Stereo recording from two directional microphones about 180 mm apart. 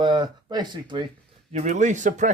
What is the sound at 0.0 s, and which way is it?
Speech, 25° right (ahead or behind).